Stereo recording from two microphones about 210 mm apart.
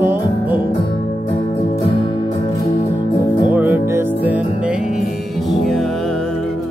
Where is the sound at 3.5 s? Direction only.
10° right (ahead or behind).